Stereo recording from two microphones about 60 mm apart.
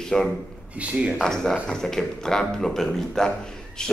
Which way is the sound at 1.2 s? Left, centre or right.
Centre.